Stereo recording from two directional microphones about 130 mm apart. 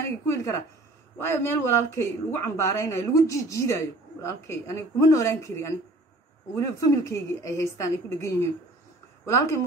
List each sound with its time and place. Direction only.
0.3 s speech: 20° left (ahead or behind)